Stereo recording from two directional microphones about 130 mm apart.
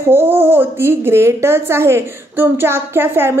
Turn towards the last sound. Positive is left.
turn(degrees=-20)  # may be behind; listen again after turning